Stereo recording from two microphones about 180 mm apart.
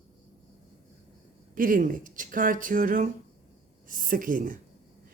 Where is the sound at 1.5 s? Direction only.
50° right (ahead or behind).